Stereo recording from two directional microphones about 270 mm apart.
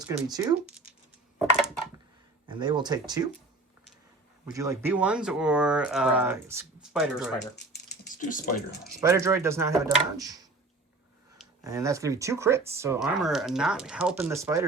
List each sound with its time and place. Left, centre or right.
0.1 s speech: centre
2.5 s speech: centre
4.5 s speech: centre
7.5 s speech: left
9.0 s speech: centre
11.6 s speech: centre